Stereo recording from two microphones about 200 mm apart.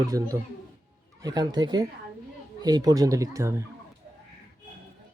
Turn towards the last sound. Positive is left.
turn(degrees=-15)  # may be behind; listen again after turning